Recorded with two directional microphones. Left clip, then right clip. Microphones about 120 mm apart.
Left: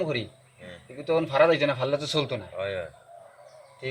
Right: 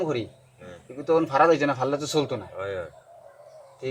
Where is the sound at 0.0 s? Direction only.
25° right (ahead or behind).